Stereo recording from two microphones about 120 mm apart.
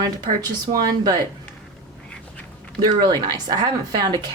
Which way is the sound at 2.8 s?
35° right (ahead or behind).